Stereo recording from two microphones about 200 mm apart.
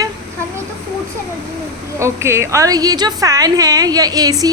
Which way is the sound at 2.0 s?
15° right (ahead or behind).